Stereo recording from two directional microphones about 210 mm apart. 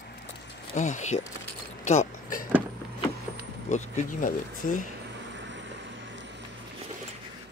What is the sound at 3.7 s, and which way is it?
Speech, 35° left (ahead or behind).